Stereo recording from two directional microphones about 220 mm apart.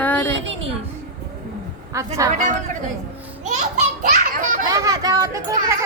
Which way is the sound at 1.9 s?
15° right (ahead or behind).